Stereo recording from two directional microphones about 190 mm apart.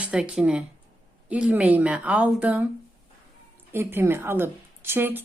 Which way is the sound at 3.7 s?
10° right (ahead or behind).